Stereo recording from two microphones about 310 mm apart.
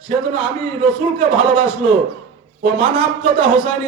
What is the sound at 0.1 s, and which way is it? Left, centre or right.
A man's voice, centre.